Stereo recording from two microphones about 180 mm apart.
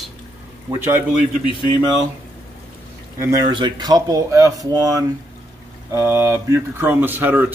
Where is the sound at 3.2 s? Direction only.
25° right (ahead or behind).